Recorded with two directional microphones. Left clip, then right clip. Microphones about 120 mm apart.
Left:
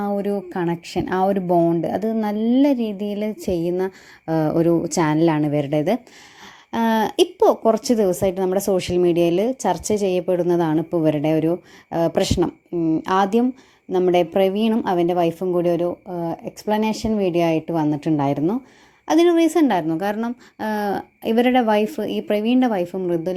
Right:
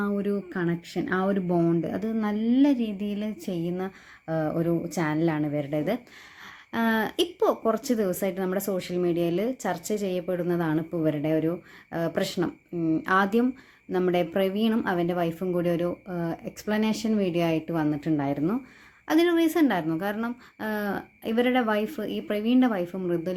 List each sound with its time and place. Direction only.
0.0 s a woman's voice: 65° left (ahead or behind)
6.7 s a woman's voice: 45° left (ahead or behind)
8.8 s a woman's voice: 60° left (ahead or behind)
19.0 s a woman's voice: 40° left (ahead or behind)